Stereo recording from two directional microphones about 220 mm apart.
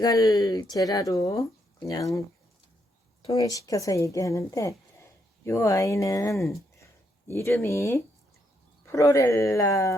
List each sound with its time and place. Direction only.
0.0 s a woman's voice: 15° left (ahead or behind)
3.3 s a woman's voice: 15° left (ahead or behind)